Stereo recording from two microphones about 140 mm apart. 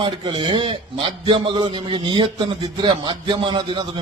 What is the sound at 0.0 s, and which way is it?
A man's voice, 35° right (ahead or behind).